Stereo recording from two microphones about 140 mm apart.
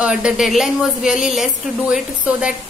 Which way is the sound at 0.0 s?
5° right (ahead or behind).